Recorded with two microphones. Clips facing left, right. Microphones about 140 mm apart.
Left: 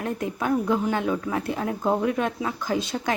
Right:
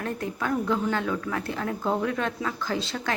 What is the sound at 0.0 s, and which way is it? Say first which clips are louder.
A woman's voice: left 3 dB; 20° left (ahead or behind).